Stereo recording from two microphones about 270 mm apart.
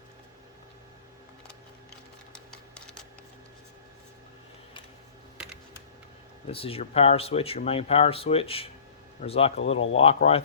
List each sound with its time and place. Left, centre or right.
2.3 s a sound: centre
6.5 s speech: left
9.6 s speech: left
10.0 s speech: left